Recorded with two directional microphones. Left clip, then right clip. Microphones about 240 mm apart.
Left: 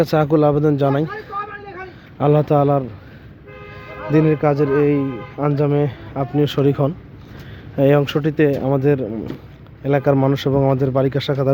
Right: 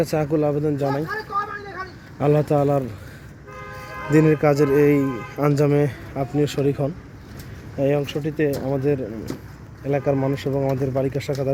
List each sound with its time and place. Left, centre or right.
0.0 s speech: centre
2.1 s speech: centre
4.1 s speech: centre